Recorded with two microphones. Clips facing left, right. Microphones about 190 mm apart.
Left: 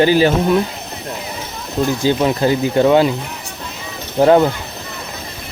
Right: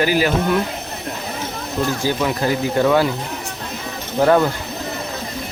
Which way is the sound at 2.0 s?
25° left (ahead or behind).